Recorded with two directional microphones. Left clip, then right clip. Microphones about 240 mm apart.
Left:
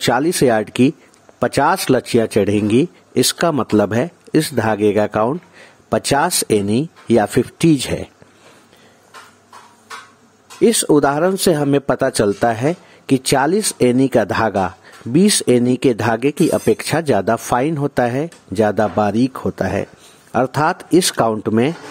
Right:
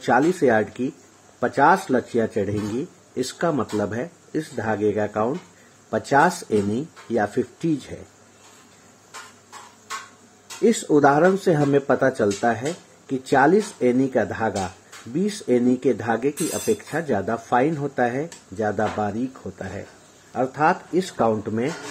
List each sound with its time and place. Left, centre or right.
0.0 s speech: left
10.6 s speech: left